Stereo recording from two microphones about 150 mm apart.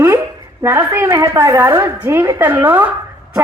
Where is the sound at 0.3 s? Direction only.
15° right (ahead or behind).